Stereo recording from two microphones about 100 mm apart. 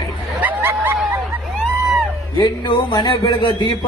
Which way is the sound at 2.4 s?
45° left (ahead or behind).